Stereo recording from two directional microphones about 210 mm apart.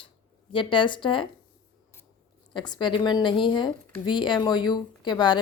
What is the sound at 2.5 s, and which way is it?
A woman's voice, 20° left (ahead or behind).